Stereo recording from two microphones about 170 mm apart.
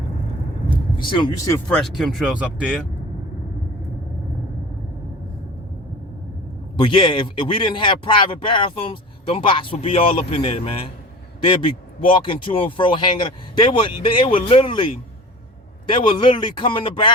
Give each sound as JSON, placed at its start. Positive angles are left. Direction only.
{"t": 1.1, "sound": "speech", "side_deg": 25}
{"t": 1.6, "sound": "speech", "side_deg": 5}
{"t": 6.7, "sound": "a man's voice", "side_deg": 30}